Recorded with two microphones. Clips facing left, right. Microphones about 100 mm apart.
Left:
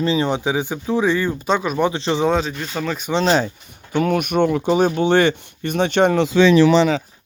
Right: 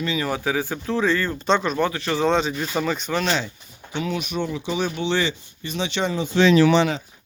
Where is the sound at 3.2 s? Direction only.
40° left (ahead or behind).